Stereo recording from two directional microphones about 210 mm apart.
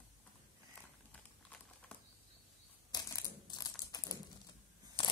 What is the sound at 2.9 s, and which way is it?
Crushing, 20° left (ahead or behind).